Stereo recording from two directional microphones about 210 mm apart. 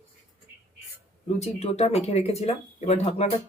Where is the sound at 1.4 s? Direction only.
30° left (ahead or behind).